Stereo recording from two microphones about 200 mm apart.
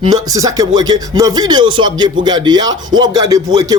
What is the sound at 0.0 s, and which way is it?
Speech, 20° right (ahead or behind).